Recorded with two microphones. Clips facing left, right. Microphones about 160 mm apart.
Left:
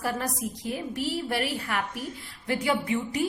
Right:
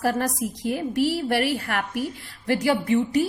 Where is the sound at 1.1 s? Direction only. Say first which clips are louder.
Right 6 dB; 70° right (ahead or behind).